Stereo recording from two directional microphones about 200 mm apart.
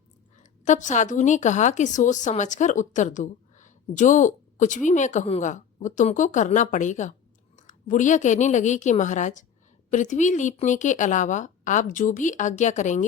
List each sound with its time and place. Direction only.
0.6 s a woman's voice: 40° left (ahead or behind)